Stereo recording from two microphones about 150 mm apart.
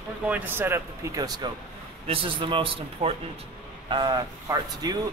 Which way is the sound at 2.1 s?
35° right (ahead or behind).